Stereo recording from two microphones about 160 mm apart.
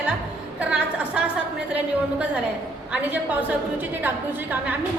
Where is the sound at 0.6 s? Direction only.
5° right (ahead or behind).